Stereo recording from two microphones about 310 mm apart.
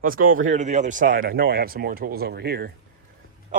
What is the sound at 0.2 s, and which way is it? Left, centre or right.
Speech, right.